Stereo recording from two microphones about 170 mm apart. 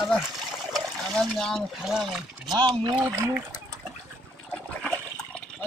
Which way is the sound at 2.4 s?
25° right (ahead or behind).